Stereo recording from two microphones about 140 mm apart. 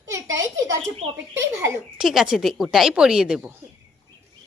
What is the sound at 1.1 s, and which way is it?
Speech, 15° right (ahead or behind).